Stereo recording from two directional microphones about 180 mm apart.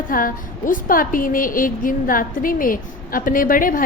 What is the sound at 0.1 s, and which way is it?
A woman's voice, 50° left (ahead or behind).